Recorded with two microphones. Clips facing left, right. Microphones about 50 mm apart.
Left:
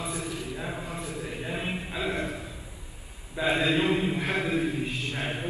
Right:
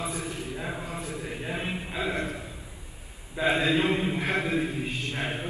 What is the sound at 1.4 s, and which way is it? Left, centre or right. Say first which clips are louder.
Chant: even; centre.